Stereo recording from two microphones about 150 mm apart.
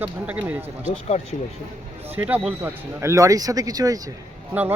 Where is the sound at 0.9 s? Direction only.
50° left (ahead or behind).